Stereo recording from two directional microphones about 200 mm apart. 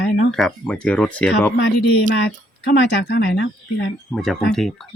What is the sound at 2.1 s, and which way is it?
Speech, 55° left (ahead or behind).